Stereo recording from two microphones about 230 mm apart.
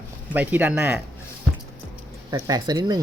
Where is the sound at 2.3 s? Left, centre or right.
Centre.